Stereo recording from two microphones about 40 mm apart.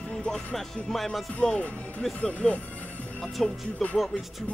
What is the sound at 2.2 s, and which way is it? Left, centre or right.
Speech, left.